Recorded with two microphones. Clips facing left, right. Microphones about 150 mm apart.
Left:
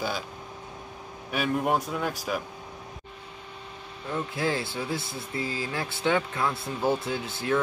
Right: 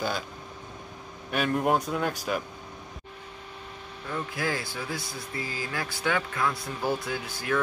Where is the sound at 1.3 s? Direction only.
Centre (ahead or behind).